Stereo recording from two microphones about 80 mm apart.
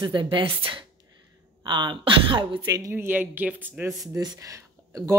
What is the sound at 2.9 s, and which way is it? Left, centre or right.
Speech, right.